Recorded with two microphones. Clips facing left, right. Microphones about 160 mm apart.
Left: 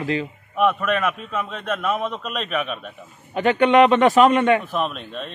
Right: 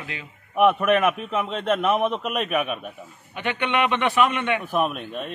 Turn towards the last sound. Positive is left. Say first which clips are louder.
# right 1 dB
turn(degrees=-10)  # may be behind; listen again after turning